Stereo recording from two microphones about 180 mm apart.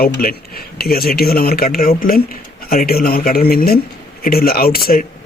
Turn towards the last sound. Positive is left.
turn(degrees=55)  # may be behind; listen again after turning